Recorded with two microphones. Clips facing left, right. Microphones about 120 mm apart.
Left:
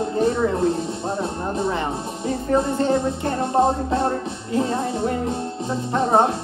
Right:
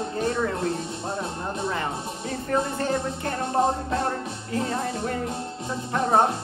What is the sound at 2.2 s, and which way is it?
Music, 20° left (ahead or behind).